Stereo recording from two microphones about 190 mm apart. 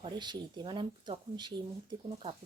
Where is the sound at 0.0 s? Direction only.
25° right (ahead or behind).